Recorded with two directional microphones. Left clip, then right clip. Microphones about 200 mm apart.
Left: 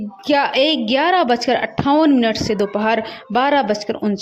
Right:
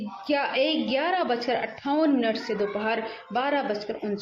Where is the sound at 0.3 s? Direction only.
40° left (ahead or behind).